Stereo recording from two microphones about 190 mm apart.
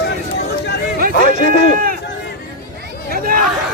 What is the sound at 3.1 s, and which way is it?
Chatter, 50° right (ahead or behind).